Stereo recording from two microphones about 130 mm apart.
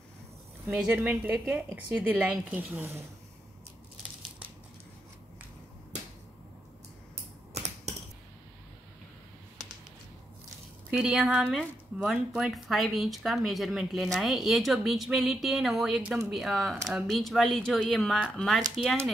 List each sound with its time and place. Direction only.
0.7 s a woman's voice: 10° right (ahead or behind)
7.5 s typewriter: 55° right (ahead or behind)
10.9 s a woman's voice: 5° right (ahead or behind)